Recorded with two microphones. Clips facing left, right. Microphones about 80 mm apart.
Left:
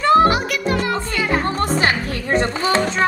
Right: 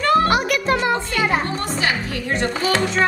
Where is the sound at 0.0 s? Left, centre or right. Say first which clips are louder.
Left 4 dB; left.